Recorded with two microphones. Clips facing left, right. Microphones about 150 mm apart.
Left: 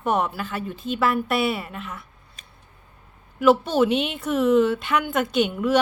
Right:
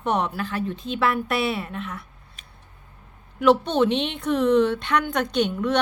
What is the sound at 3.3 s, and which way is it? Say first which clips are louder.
A woman's voice: left 1 dB; 5° left (ahead or behind).